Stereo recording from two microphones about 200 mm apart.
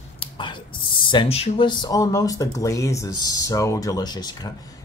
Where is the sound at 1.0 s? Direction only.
25° left (ahead or behind).